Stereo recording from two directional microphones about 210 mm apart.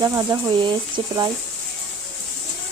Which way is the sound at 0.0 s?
15° right (ahead or behind).